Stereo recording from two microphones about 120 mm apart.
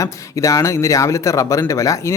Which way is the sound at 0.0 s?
25° left (ahead or behind).